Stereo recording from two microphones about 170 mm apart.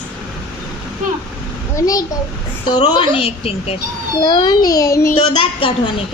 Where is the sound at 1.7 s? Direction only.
20° left (ahead or behind).